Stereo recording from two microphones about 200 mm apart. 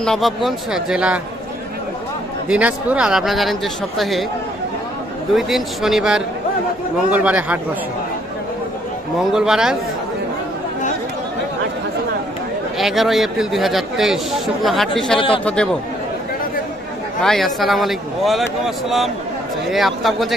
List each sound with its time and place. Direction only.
0.0 s a man's voice: centre (ahead or behind)
2.4 s a man's voice: 5° right (ahead or behind)
5.3 s a man's voice: centre (ahead or behind)
9.3 s a man's voice: centre (ahead or behind)
12.7 s a man's voice: centre (ahead or behind)
15.1 s a man's voice: 25° left (ahead or behind)
15.4 s a man's voice: 5° left (ahead or behind)
17.2 s a man's voice: centre (ahead or behind)
19.7 s a man's voice: centre (ahead or behind)